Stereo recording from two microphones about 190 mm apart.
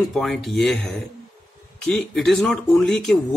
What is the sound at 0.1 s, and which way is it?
Speech, centre (ahead or behind).